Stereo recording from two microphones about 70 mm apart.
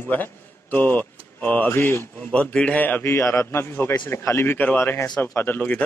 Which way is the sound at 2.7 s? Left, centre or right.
Left.